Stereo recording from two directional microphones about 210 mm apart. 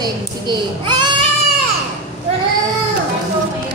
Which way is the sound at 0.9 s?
90° right.